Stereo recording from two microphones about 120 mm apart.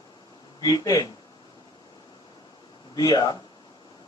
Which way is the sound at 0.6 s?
30° left (ahead or behind).